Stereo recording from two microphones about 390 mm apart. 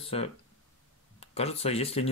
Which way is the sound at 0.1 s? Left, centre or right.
Centre.